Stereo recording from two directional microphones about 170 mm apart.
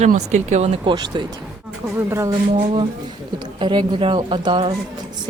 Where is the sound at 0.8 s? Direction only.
25° right (ahead or behind).